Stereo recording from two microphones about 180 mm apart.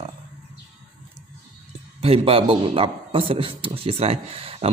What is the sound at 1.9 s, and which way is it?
Speech, 35° right (ahead or behind).